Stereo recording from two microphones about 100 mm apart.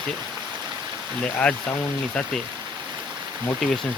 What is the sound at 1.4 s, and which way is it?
Speech, 10° left (ahead or behind).